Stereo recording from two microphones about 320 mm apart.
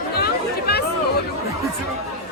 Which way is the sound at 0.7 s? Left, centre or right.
Left.